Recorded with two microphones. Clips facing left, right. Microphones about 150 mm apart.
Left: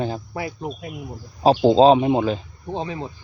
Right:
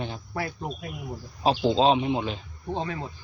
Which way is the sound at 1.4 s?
40° left (ahead or behind).